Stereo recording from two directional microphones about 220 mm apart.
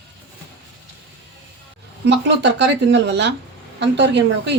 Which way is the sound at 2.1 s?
50° right (ahead or behind).